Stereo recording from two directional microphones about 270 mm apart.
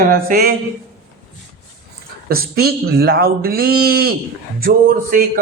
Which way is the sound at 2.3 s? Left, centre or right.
Right.